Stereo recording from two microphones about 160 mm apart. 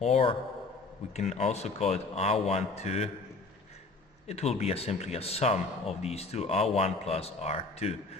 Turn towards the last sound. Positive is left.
turn(degrees=40)  # may be behind; listen again after turning